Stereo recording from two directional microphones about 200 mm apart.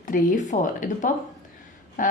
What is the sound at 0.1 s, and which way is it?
A woman's voice, 40° left (ahead or behind).